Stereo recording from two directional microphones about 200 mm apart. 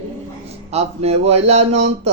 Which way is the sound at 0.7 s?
30° right (ahead or behind).